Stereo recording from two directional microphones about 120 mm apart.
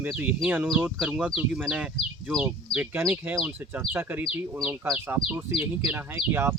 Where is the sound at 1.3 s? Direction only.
Centre (ahead or behind).